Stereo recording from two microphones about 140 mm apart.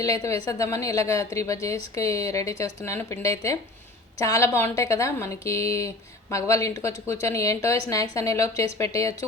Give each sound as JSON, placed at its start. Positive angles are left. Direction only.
{"t": 0.0, "sound": "a woman's voice", "side_deg": 25}